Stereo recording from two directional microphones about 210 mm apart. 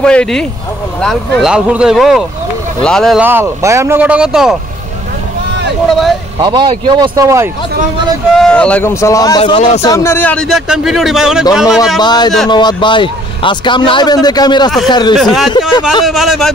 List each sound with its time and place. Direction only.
0.0 s a man's voice: 5° left (ahead or behind)
3.3 s speech: 10° right (ahead or behind)
6.4 s speech: 20° right (ahead or behind)
8.4 s speech: 5° left (ahead or behind)
9.4 s a man's voice: 30° left (ahead or behind)
9.8 s a man's voice: 15° left (ahead or behind); by 11.8 s 5° right (ahead or behind)
12.0 s a man's voice: 20° left (ahead or behind)
15.1 s a man's voice: centre (ahead or behind)